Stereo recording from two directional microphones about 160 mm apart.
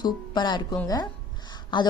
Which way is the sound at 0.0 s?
25° left (ahead or behind).